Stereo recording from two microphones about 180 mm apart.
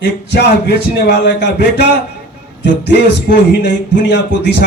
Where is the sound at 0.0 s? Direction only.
70° left (ahead or behind).